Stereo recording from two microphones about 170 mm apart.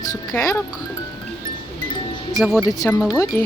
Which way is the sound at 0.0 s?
20° left (ahead or behind).